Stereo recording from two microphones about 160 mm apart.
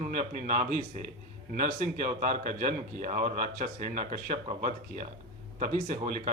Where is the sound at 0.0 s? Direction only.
55° right (ahead or behind).